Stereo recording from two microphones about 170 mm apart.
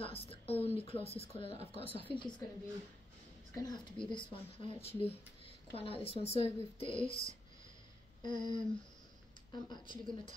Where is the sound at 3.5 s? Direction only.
25° left (ahead or behind).